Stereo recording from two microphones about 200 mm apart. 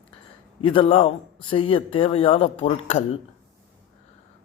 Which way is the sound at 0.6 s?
25° left (ahead or behind).